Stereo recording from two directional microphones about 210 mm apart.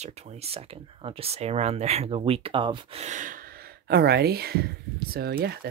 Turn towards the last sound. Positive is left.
turn(degrees=-50)  # may be behind; listen again after turning